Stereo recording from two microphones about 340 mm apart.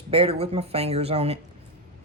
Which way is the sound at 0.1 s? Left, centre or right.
Centre.